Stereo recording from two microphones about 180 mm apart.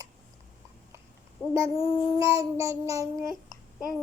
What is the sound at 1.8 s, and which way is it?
Child singing, 20° right (ahead or behind).